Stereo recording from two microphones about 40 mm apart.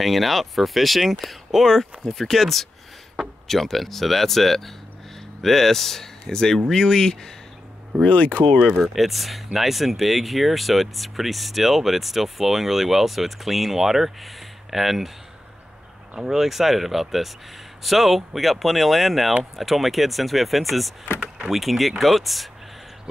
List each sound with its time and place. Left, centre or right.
0.0 s speech: centre
1.7 s speech: centre
8.0 s speech: left
8.8 s speech: centre
16.2 s speech: centre